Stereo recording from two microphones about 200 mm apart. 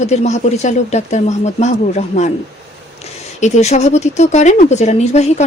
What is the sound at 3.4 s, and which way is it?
Speech, 35° left (ahead or behind).